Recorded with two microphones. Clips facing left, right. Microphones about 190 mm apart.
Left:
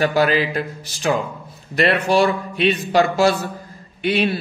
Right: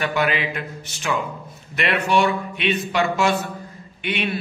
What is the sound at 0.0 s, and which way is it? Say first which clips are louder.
Speech: left 5 dB; 35° left (ahead or behind).